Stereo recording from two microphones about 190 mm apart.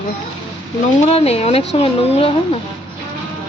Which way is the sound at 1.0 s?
30° left (ahead or behind).